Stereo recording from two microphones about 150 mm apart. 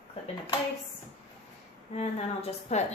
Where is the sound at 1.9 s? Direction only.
45° left (ahead or behind).